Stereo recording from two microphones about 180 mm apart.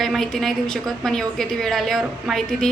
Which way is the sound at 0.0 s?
Centre (ahead or behind).